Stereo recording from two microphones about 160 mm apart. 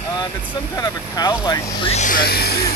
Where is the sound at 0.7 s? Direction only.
20° left (ahead or behind).